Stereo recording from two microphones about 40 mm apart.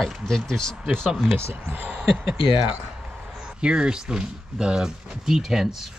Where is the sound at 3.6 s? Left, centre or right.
Right.